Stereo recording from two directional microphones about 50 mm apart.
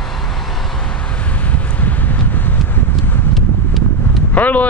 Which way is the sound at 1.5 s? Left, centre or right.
Left.